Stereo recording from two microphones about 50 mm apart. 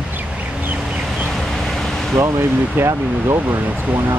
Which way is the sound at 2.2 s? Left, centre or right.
Right.